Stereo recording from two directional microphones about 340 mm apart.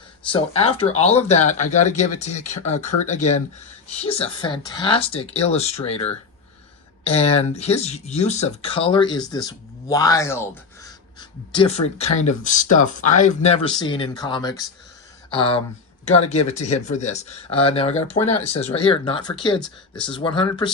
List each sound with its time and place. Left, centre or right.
0.3 s speech: centre